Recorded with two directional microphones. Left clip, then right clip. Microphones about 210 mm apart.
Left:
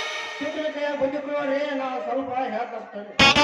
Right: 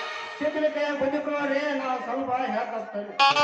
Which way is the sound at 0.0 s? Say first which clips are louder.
Even; 50° left (ahead or behind).